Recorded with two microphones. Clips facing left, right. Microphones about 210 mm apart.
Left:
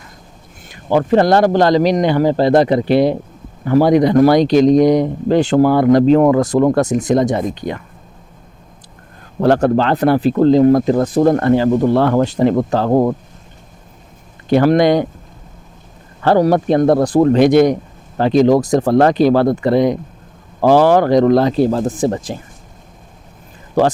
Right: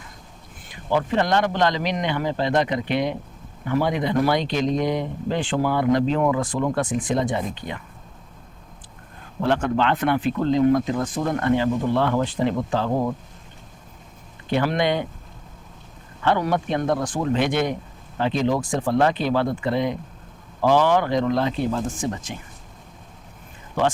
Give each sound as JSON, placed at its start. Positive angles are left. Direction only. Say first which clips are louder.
{"t": 0.7, "sound": "speech", "louder": "left 9 dB", "side_deg": 40}
{"t": 9.4, "sound": "speech", "louder": "left 8 dB", "side_deg": 40}
{"t": 14.5, "sound": "speech", "louder": "left 10 dB", "side_deg": 40}
{"t": 16.2, "sound": "speech", "louder": "left 9 dB", "side_deg": 35}